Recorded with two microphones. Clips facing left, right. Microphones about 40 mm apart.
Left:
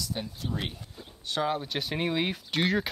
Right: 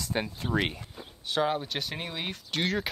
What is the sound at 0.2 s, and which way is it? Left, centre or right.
Speech, right.